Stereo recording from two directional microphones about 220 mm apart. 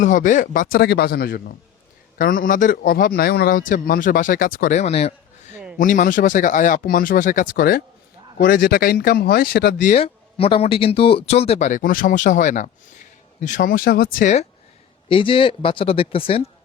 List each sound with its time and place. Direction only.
0.0 s a man's voice: 35° left (ahead or behind)
5.8 s a man's voice: 35° left (ahead or behind)
10.0 s a man's voice: 25° left (ahead or behind)
15.1 s speech: 25° left (ahead or behind)